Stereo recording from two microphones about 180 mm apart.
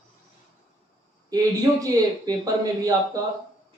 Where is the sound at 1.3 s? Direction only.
20° right (ahead or behind).